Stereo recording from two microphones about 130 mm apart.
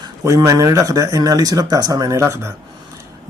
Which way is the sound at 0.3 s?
25° right (ahead or behind).